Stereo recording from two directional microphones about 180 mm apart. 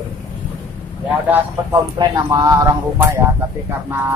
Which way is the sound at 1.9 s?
20° right (ahead or behind).